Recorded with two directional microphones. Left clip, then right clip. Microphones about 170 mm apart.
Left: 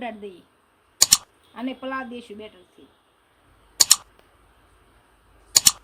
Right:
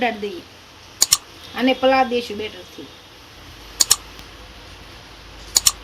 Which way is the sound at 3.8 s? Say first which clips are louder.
Even; centre (ahead or behind).